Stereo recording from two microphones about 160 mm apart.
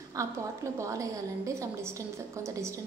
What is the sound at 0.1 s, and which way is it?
A woman's voice, 20° right (ahead or behind).